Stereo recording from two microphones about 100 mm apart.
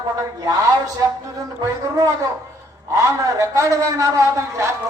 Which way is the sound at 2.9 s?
30° right (ahead or behind).